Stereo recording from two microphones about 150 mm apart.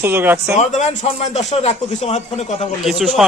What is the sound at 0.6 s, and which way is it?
A man's voice, 50° left (ahead or behind).